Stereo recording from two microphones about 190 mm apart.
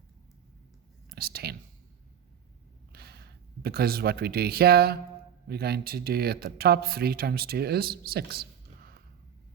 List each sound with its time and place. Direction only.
1.1 s speech: 55° right (ahead or behind)
2.9 s speech: 60° right (ahead or behind)